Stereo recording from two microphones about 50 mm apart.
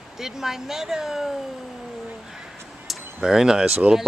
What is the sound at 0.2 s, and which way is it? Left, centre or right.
Speech, centre.